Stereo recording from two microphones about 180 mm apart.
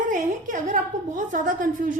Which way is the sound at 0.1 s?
45° right (ahead or behind).